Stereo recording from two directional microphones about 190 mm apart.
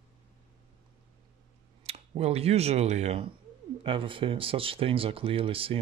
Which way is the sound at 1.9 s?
35° right (ahead or behind).